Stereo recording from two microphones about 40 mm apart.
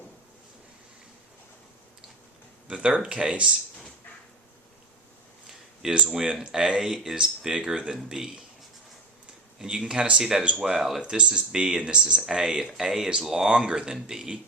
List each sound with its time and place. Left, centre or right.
2.6 s speech: right
5.8 s speech: right
9.6 s speech: centre
11.0 s speech: right
13.5 s speech: centre